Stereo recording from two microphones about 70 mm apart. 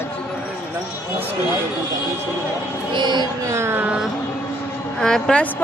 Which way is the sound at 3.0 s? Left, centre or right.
Right.